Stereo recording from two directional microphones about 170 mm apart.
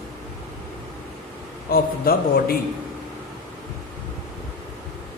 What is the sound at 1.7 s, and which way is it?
Speech, 60° left (ahead or behind).